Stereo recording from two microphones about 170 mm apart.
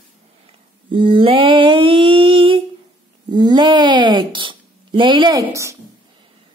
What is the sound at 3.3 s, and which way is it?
Speech, 25° right (ahead or behind).